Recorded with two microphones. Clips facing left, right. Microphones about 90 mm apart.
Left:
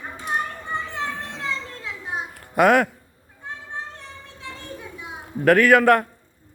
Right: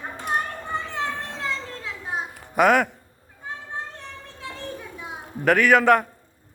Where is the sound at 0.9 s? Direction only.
35° right (ahead or behind).